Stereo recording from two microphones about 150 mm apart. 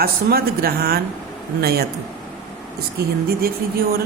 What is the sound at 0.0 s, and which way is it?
A woman's voice, 90° right.